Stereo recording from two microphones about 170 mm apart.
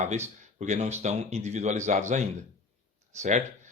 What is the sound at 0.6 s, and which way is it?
Speech, 45° right (ahead or behind).